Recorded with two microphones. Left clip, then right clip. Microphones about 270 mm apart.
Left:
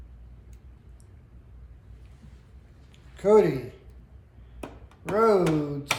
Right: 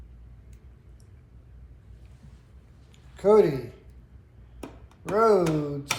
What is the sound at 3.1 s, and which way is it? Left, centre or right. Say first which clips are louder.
Speech: even; centre.